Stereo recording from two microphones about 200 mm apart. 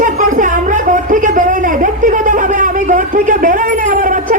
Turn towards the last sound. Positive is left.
turn(degrees=-40)  # may be behind; listen again after turning